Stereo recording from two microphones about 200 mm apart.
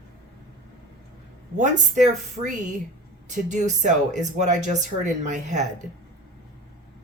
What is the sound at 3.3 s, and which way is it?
Speech, 40° right (ahead or behind).